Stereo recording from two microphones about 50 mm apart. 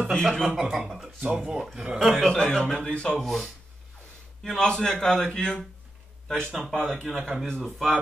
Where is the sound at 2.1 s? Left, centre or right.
Centre.